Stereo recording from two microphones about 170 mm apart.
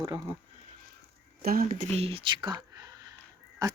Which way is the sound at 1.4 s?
60° right (ahead or behind).